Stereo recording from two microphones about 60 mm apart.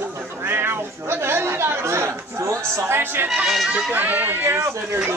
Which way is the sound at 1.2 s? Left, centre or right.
Right.